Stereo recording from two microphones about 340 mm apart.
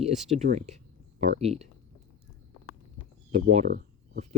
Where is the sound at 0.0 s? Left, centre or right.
Centre.